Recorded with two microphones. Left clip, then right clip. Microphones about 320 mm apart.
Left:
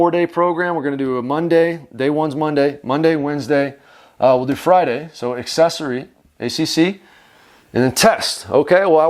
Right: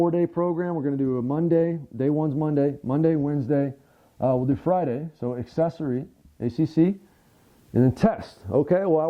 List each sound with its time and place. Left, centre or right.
0.0 s speech: centre